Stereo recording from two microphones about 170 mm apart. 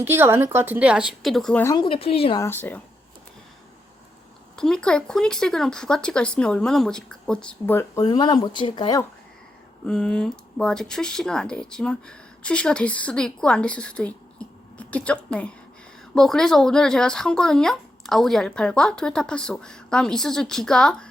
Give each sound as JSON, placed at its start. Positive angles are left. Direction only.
{"t": 0.0, "sound": "speech", "side_deg": -15}
{"t": 1.6, "sound": "speech", "side_deg": 25}
{"t": 2.4, "sound": "speech", "side_deg": 10}
{"t": 4.5, "sound": "speech", "side_deg": 5}
{"t": 9.8, "sound": "speech", "side_deg": 5}